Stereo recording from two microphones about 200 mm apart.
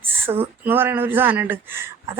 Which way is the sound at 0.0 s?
10° right (ahead or behind).